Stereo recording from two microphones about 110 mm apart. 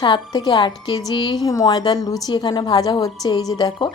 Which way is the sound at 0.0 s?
40° left (ahead or behind).